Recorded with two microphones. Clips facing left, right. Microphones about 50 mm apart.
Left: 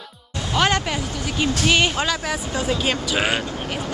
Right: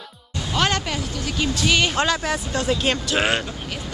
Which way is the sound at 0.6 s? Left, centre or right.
Centre.